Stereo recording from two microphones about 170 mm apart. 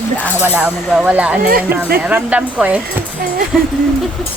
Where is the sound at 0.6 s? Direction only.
5° right (ahead or behind).